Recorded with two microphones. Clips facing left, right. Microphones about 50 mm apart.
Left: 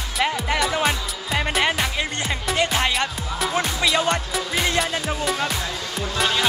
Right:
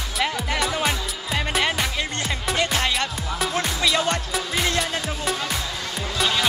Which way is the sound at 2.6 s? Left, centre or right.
Centre.